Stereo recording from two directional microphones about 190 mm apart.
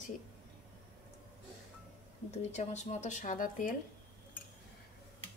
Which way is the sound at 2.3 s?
35° left (ahead or behind).